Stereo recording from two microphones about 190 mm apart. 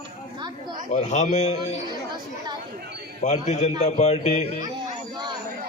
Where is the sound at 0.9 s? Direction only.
40° left (ahead or behind).